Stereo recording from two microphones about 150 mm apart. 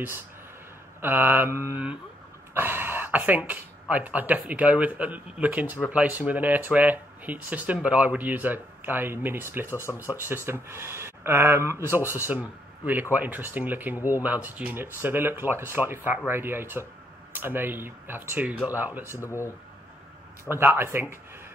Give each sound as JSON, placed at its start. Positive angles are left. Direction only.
{"t": 1.0, "sound": "speech", "side_deg": -15}
{"t": 19.2, "sound": "speech", "side_deg": 20}
{"t": 20.4, "sound": "speech", "side_deg": -15}